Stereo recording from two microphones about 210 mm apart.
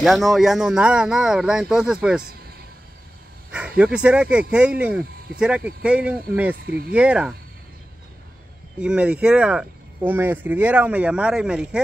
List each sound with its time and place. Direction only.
0.0 s speech: centre (ahead or behind)
3.5 s speech: 5° right (ahead or behind)
8.7 s speech: 5° right (ahead or behind)